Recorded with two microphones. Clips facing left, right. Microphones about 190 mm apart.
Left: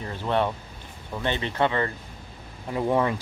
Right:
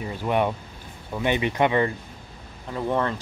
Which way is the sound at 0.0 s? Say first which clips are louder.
Right 2 dB; 10° right (ahead or behind).